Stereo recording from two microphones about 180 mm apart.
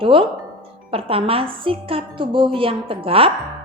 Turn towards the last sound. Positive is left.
turn(degrees=-30)  # may be behind; listen again after turning